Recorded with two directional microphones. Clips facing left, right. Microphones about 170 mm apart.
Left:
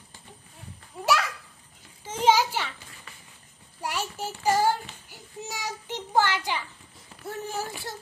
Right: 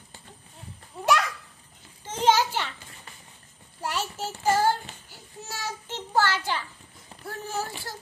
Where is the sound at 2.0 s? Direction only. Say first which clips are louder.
Even; 10° left (ahead or behind).